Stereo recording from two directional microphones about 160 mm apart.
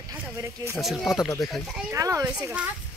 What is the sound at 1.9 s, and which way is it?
Speech, 20° right (ahead or behind).